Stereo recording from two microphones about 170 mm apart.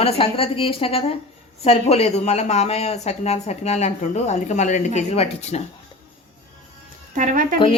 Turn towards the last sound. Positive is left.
turn(degrees=-50)  # may be behind; listen again after turning